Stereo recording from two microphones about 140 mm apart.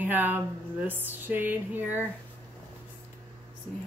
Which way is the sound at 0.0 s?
15° right (ahead or behind).